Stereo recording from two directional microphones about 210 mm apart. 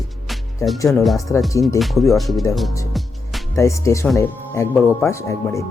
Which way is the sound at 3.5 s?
15° left (ahead or behind).